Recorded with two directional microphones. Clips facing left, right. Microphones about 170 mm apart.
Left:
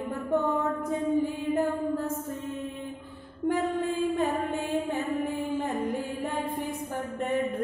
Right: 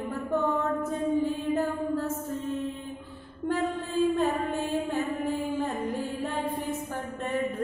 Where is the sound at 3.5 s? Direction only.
15° left (ahead or behind).